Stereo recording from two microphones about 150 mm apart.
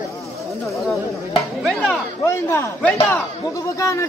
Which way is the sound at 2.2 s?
15° left (ahead or behind).